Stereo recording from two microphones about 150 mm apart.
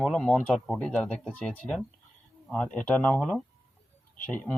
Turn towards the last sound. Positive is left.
turn(degrees=10)  # may be behind; listen again after turning